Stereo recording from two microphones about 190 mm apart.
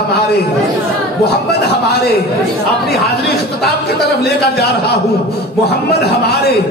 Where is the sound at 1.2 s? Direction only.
60° left (ahead or behind).